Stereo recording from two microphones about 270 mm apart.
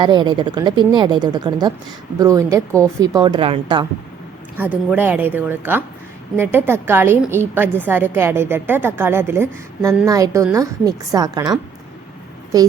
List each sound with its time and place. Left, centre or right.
0.0 s a woman's voice: centre
4.5 s a woman's voice: centre
12.5 s a woman's voice: centre